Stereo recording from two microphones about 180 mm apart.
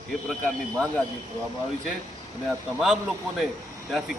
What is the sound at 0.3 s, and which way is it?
Speech, 5° left (ahead or behind).